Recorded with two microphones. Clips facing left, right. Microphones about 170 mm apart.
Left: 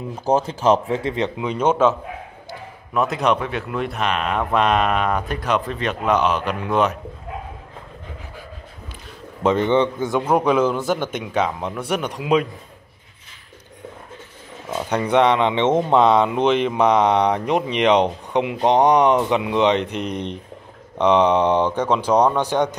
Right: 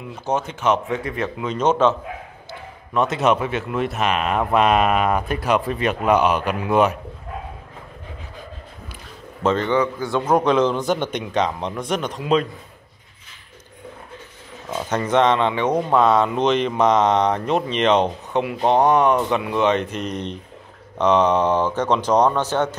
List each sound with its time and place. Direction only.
0.1 s a man's voice: 35° left (ahead or behind); by 7.0 s 10° right (ahead or behind)
9.4 s mantra: 15° left (ahead or behind)
9.8 s speech: 20° left (ahead or behind)
10.3 s mantra: 5° left (ahead or behind)
14.7 s mantra: 10° left (ahead or behind)